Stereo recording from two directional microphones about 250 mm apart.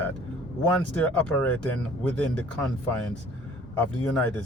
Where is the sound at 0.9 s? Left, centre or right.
Centre.